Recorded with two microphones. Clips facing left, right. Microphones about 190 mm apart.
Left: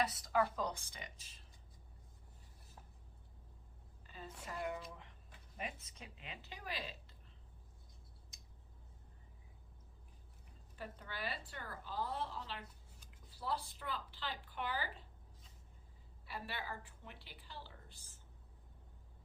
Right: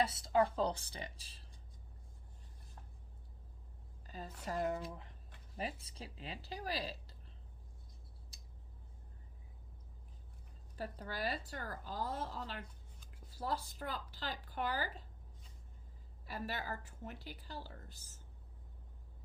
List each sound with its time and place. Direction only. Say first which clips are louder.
0.0 s a woman's voice: right 3 dB; 30° right (ahead or behind)
4.0 s a sound: right 5 dB; 40° right (ahead or behind)
4.4 s a woman's voice: right 6 dB; 40° right (ahead or behind)
8.3 s a sound: right 2 dB; 35° right (ahead or behind)
10.8 s a woman's voice: right 5 dB; 40° right (ahead or behind)
16.2 s a woman's voice: right 4 dB; 40° right (ahead or behind)